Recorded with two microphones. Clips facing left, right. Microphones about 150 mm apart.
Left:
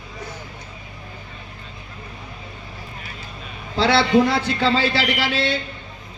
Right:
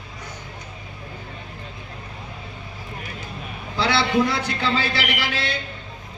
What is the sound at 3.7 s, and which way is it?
A man's voice, 25° left (ahead or behind).